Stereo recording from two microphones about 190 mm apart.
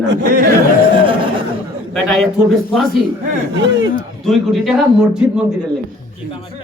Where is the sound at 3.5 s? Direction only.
70° right (ahead or behind).